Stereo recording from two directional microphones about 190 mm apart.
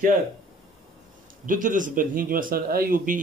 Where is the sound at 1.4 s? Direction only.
45° right (ahead or behind).